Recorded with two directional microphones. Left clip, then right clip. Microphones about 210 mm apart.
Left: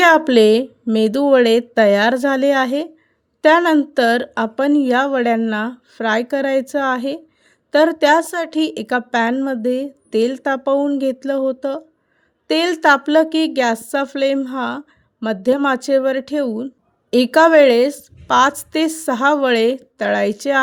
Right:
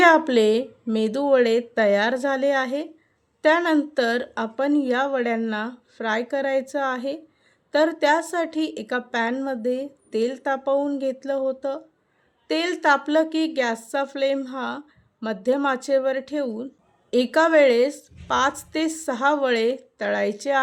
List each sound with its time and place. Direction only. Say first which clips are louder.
0.0 s a woman's voice: left 5 dB; 45° left (ahead or behind)